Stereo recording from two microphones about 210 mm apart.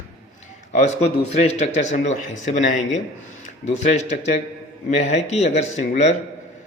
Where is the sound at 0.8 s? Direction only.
30° left (ahead or behind).